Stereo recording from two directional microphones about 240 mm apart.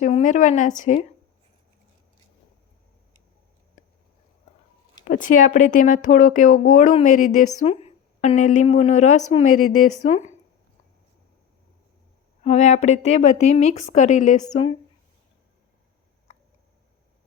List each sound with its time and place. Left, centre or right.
0.0 s speech: left
5.0 s speech: left
6.1 s speech: left
6.3 s speech: left
9.5 s speech: left
10.1 s speech: left
12.4 s speech: left